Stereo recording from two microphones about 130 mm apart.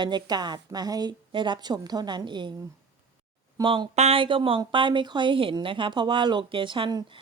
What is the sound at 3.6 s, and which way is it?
Speech, 35° right (ahead or behind).